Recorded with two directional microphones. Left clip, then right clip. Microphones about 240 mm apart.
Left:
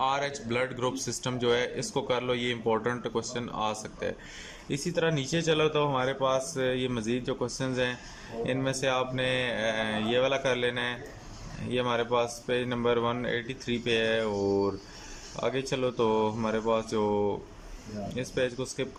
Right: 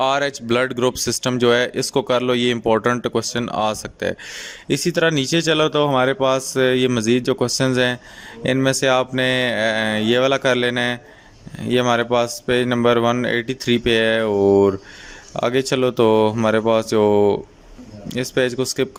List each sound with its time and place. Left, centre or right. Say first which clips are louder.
0.0 s speech: right 10 dB; right